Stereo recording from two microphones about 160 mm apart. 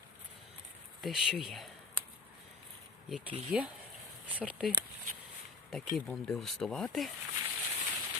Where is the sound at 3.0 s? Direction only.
Centre (ahead or behind).